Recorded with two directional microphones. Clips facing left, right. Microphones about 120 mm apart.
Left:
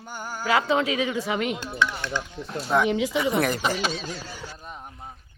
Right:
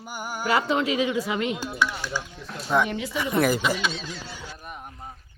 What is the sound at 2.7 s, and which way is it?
Speech, 5° left (ahead or behind).